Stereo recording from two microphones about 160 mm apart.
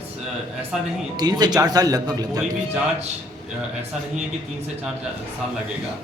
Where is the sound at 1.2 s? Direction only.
25° right (ahead or behind).